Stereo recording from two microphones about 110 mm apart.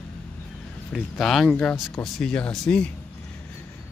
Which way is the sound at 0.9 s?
5° left (ahead or behind).